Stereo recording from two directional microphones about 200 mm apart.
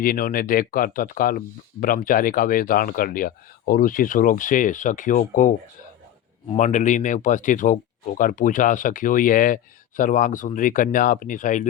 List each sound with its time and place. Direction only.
0.0 s speech: 45° left (ahead or behind)